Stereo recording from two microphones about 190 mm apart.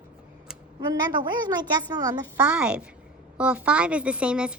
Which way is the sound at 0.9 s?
25° right (ahead or behind).